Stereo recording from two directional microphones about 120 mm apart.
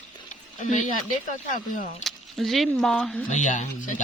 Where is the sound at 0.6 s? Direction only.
85° left.